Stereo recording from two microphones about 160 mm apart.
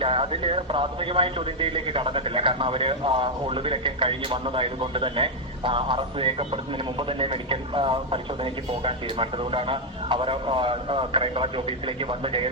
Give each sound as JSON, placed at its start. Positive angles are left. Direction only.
{"t": 0.0, "sound": "a man's voice", "side_deg": -35}